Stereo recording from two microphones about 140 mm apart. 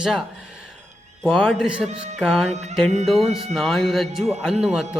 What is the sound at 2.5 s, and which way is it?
Music, 55° right (ahead or behind).